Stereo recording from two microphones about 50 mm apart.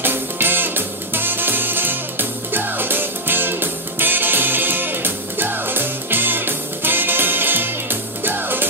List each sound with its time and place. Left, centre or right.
0.0 s music: right